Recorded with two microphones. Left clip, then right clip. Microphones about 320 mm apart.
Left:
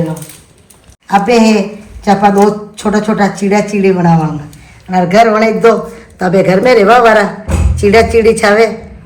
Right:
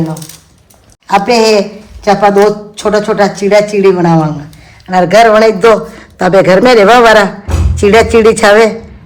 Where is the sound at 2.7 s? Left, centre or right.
Right.